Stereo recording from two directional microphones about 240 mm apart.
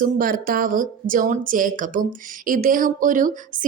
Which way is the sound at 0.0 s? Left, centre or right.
Right.